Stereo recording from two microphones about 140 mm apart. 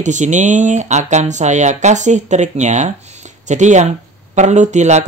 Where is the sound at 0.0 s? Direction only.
60° right (ahead or behind).